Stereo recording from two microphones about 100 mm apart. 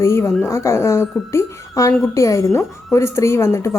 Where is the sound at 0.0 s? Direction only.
30° left (ahead or behind).